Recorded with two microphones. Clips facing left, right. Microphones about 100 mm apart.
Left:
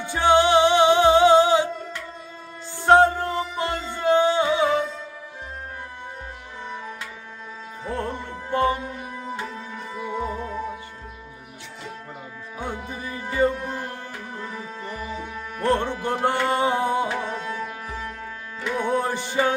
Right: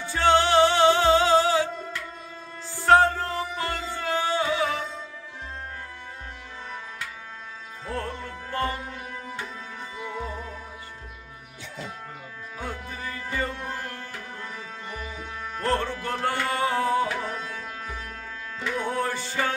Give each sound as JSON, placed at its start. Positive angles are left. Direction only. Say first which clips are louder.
{"t": 0.0, "sound": "music", "louder": "left 3 dB", "side_deg": 15}
{"t": 2.7, "sound": "music", "louder": "left 3 dB", "side_deg": 20}
{"t": 7.8, "sound": "music", "louder": "left 3 dB", "side_deg": 20}
{"t": 12.5, "sound": "music", "louder": "left 4 dB", "side_deg": 20}
{"t": 14.8, "sound": "music", "louder": "left 5 dB", "side_deg": 35}
{"t": 15.6, "sound": "music", "louder": "left 4 dB", "side_deg": 20}